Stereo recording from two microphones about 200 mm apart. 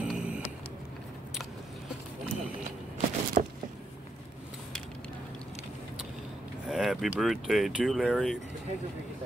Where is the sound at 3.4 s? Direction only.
45° right (ahead or behind).